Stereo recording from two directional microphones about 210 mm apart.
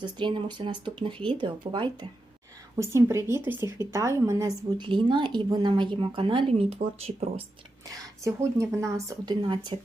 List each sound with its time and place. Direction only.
0.0 s a woman's voice: 20° right (ahead or behind)
7.9 s a woman's voice: 15° right (ahead or behind)